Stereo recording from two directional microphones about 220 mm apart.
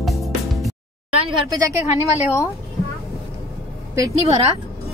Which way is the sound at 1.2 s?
20° right (ahead or behind).